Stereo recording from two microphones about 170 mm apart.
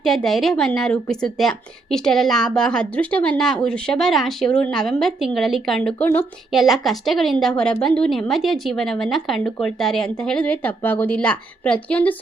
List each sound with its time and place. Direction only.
0.0 s a woman's voice: centre (ahead or behind)